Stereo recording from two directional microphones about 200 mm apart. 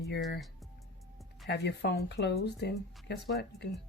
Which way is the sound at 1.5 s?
55° left (ahead or behind).